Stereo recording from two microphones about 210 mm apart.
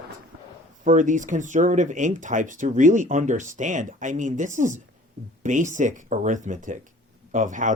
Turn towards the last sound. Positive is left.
turn(degrees=-35)  # may be behind; listen again after turning